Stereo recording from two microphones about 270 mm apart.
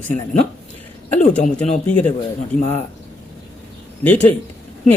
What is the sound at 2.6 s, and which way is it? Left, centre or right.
Speech, left.